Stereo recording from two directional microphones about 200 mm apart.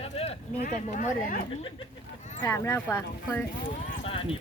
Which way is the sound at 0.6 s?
40° left (ahead or behind).